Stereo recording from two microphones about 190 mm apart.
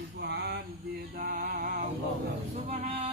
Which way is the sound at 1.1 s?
50° right (ahead or behind).